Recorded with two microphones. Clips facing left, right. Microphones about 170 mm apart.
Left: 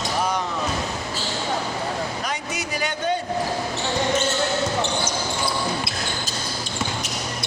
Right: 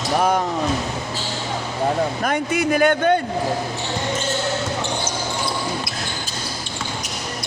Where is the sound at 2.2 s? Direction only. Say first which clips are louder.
Right 8 dB; 55° right (ahead or behind).